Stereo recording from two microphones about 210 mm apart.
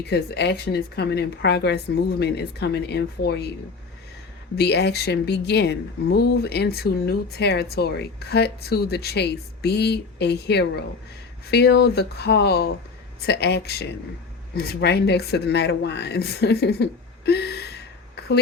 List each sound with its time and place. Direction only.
0.1 s speech: 50° left (ahead or behind)
4.5 s speech: 50° left (ahead or behind)